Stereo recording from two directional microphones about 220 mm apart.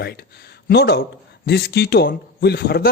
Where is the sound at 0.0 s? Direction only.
45° left (ahead or behind).